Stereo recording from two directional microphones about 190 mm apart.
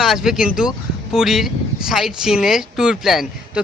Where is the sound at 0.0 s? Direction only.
Centre (ahead or behind).